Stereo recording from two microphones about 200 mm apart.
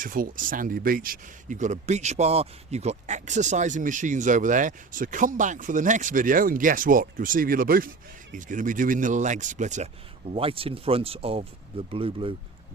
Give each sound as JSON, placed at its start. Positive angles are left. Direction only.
{"t": 0.0, "sound": "speech", "side_deg": -45}